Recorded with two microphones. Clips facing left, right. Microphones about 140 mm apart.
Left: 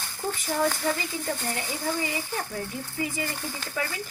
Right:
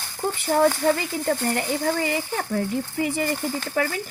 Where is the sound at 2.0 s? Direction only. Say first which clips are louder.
Right 5 dB; 65° right (ahead or behind).